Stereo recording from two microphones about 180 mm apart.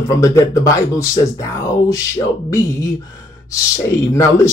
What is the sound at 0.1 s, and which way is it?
Speech, 15° left (ahead or behind).